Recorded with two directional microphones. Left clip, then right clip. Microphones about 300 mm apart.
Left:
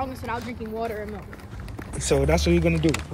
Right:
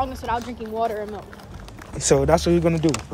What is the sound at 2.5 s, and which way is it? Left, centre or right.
Speech, right.